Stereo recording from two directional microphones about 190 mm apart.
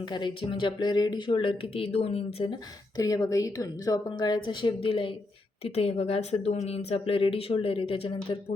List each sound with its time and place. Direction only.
0.0 s speech: 25° left (ahead or behind)